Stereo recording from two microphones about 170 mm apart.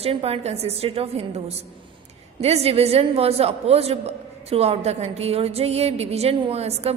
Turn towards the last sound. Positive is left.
turn(degrees=-35)  # may be behind; listen again after turning